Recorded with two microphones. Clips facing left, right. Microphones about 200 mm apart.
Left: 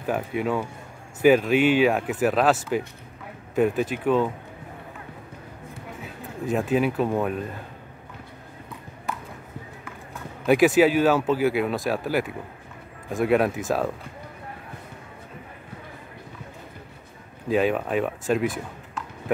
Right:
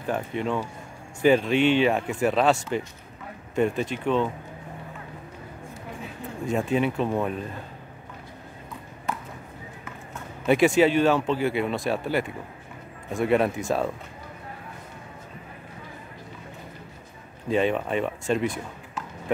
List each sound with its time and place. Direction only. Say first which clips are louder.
0.0 s speech: left 2 dB; 5° left (ahead or behind)
6.4 s speech: left 2 dB; centre (ahead or behind)
10.4 s speech: left 2 dB; centre (ahead or behind)
17.5 s speech: left 1 dB; 5° left (ahead or behind)